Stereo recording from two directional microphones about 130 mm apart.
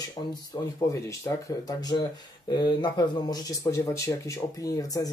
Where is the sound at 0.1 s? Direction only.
30° left (ahead or behind).